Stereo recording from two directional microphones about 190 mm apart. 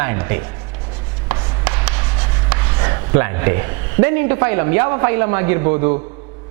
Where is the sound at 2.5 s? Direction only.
20° right (ahead or behind).